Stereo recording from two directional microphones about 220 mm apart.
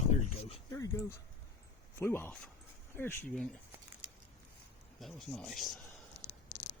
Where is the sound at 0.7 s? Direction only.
15° left (ahead or behind).